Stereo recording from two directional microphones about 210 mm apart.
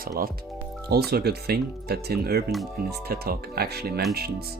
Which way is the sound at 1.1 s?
50° right (ahead or behind).